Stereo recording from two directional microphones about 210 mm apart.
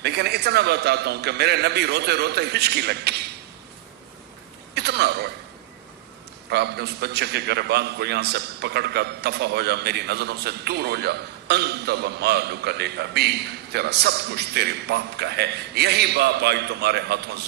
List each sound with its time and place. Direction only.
0.0 s a man's voice: 50° right (ahead or behind)
4.7 s speech: 50° right (ahead or behind)
6.5 s a man's voice: 50° right (ahead or behind)